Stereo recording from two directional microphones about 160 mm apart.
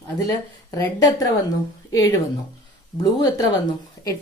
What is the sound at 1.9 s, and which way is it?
A woman's voice, 20° left (ahead or behind).